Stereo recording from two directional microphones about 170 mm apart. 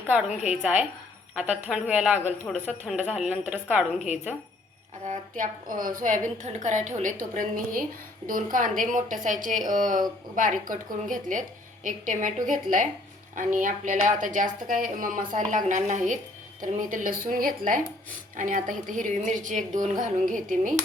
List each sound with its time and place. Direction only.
0.3 s a woman's voice: 45° left (ahead or behind)
0.5 s a woman's voice: 5° right (ahead or behind)
5.0 s speech: 45° right (ahead or behind)